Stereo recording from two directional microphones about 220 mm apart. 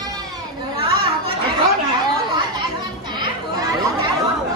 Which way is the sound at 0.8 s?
25° right (ahead or behind).